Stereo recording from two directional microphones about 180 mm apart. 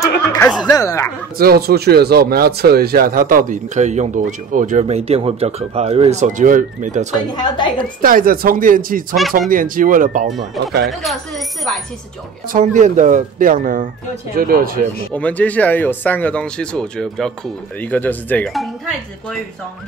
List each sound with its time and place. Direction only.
0.0 s snicker: 15° left (ahead or behind)
0.7 s speech: 20° left (ahead or behind)
1.4 s speech: 60° right (ahead or behind); by 7.2 s 40° right (ahead or behind)
7.3 s a woman's voice: 25° left (ahead or behind)
8.0 s speech: 50° right (ahead or behind)
10.3 s speech: centre (ahead or behind)
12.5 s speech: 45° right (ahead or behind)
15.1 s speech: 10° left (ahead or behind)